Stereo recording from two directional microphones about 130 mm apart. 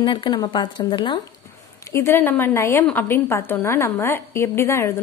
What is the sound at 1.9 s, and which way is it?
A woman's voice, 20° left (ahead or behind).